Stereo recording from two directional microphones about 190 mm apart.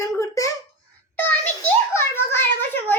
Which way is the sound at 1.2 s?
10° left (ahead or behind).